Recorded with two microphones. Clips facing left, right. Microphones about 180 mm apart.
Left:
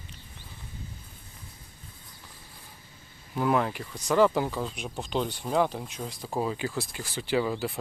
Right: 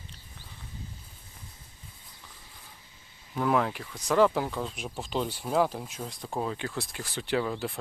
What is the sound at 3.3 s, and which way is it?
Speech, centre (ahead or behind).